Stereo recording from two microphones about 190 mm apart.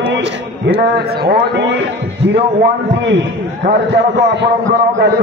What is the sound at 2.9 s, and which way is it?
A man's voice, 65° right (ahead or behind).